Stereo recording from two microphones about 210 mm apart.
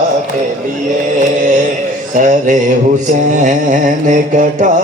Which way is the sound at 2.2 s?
35° right (ahead or behind).